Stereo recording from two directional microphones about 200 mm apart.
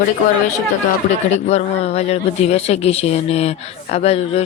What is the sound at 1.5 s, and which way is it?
Speech, 35° left (ahead or behind).